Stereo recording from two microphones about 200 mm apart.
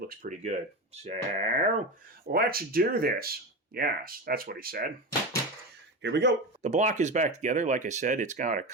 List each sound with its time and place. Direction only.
0.1 s speech: 40° right (ahead or behind)
2.2 s speech: 50° right (ahead or behind)
6.0 s speech: 60° right (ahead or behind)
6.6 s speech: 35° right (ahead or behind)